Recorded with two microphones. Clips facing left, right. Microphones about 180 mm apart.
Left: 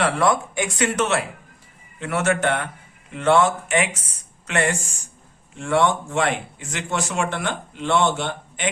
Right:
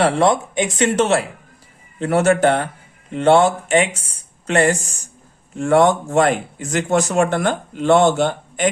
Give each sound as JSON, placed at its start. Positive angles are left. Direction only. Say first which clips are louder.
{"t": 0.0, "sound": "speech", "louder": "right 4 dB", "side_deg": -25}